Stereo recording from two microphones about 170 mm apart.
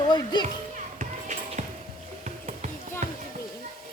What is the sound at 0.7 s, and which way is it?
Music, 45° right (ahead or behind).